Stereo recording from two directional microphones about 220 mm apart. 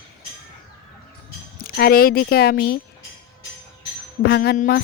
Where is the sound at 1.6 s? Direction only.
45° left (ahead or behind).